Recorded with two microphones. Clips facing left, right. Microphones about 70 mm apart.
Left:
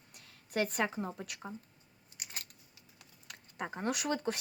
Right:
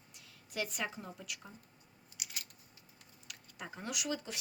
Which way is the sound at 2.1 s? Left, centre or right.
Left.